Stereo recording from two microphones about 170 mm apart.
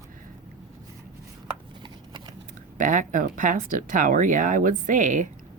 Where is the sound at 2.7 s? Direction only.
50° right (ahead or behind).